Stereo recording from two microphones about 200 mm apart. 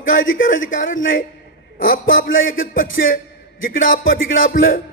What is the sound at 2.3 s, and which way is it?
Speech, 75° left (ahead or behind).